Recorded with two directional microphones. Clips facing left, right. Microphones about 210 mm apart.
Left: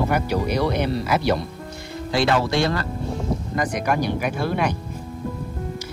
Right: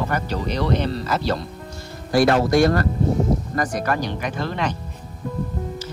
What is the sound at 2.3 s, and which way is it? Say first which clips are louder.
Speech: right 4 dB; 50° right (ahead or behind).